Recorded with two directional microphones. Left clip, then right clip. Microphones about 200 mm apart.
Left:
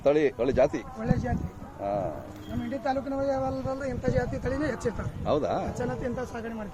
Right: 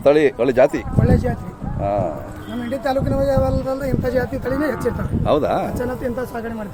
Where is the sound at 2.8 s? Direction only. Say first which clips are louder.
Right 9 dB; 40° right (ahead or behind); by 3.9 s 25° right (ahead or behind).